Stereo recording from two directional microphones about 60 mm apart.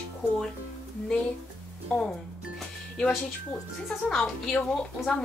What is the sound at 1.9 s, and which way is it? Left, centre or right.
Speech, left.